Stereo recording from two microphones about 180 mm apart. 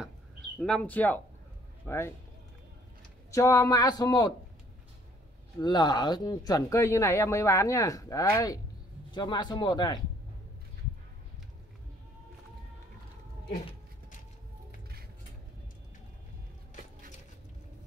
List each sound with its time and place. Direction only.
0.6 s speech: 5° left (ahead or behind)
3.3 s speech: 15° left (ahead or behind)
5.6 s speech: 25° left (ahead or behind)